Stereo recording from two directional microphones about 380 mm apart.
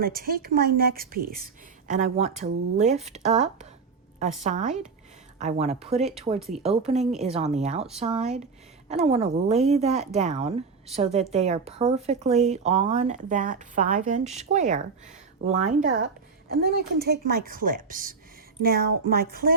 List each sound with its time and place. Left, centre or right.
0.0 s speech: right